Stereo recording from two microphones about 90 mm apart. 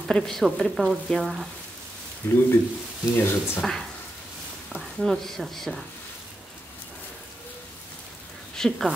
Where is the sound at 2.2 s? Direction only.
30° left (ahead or behind).